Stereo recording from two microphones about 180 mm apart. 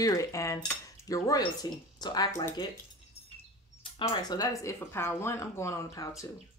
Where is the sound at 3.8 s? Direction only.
25° left (ahead or behind).